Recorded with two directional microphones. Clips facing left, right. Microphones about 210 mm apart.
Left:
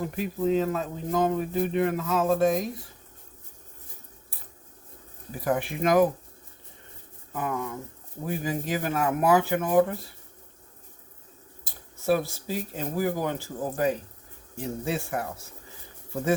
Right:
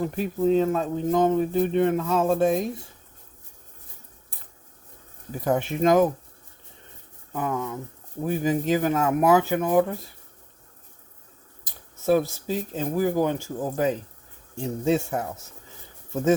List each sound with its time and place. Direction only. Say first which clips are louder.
0.2 s speech: right 3 dB; 30° right (ahead or behind)
5.5 s speech: right 4 dB; 25° right (ahead or behind)
7.3 s speech: right 3 dB; 25° right (ahead or behind)
12.5 s speech: right 4 dB; 20° right (ahead or behind)